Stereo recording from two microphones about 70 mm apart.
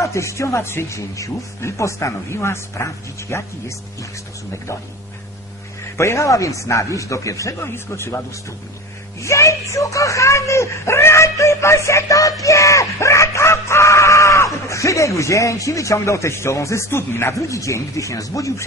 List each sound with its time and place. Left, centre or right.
0.0 s speech: left
5.9 s speech: left
7.6 s speech: left
9.2 s speech: left